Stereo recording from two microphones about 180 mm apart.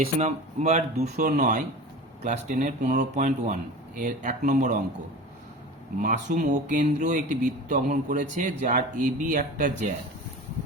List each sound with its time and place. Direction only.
0.0 s speech: 35° right (ahead or behind)
6.0 s speech: 45° right (ahead or behind)